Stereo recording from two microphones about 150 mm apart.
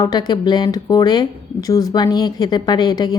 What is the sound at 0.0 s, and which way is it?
Speech, 25° left (ahead or behind).